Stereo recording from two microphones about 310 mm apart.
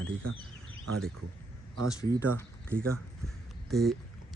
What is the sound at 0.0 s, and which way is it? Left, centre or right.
Speech, right.